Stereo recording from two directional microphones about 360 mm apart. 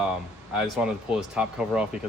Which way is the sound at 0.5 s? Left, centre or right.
Centre.